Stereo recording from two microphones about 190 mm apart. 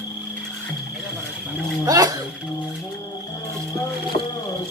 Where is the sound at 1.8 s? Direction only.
20° right (ahead or behind).